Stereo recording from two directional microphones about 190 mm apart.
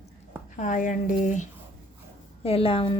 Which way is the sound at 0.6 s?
40° left (ahead or behind).